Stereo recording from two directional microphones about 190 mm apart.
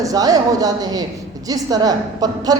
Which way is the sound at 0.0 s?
20° right (ahead or behind).